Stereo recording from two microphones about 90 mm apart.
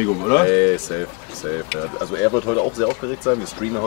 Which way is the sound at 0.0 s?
20° left (ahead or behind).